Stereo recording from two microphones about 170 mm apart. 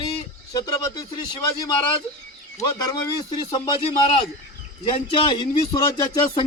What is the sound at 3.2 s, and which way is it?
A man's voice, 25° left (ahead or behind).